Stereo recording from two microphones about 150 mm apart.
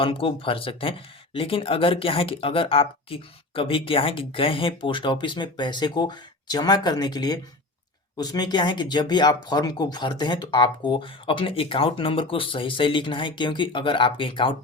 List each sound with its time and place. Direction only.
0.0 s speech: 35° left (ahead or behind)